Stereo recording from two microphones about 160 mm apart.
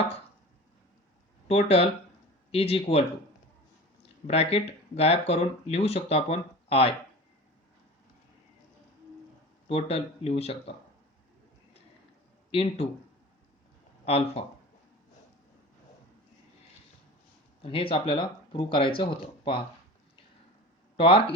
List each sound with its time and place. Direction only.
1.5 s speech: 40° left (ahead or behind)
4.3 s speech: 40° left (ahead or behind)
9.6 s speech: 40° left (ahead or behind)
12.5 s a man's voice: 35° left (ahead or behind)
14.0 s speech: 40° left (ahead or behind)
17.6 s speech: 35° left (ahead or behind)
20.9 s speech: 35° left (ahead or behind)